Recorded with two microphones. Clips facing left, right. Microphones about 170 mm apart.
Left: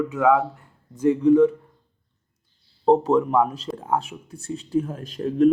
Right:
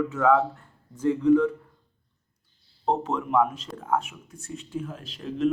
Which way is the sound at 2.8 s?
35° left (ahead or behind).